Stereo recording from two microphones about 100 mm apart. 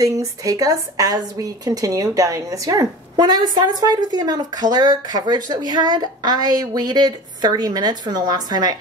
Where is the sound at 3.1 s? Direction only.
45° right (ahead or behind).